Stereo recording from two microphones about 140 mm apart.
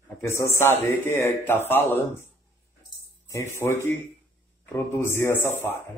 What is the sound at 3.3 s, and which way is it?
A man's voice, 20° left (ahead or behind).